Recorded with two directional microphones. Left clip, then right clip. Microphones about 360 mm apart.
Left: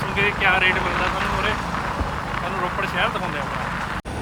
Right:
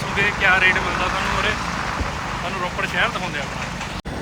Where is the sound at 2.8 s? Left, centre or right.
Centre.